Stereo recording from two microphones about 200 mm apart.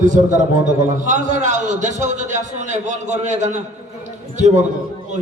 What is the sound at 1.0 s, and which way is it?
A man's voice, 40° right (ahead or behind).